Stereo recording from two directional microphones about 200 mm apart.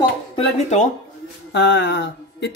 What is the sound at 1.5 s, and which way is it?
Speech, 60° left (ahead or behind).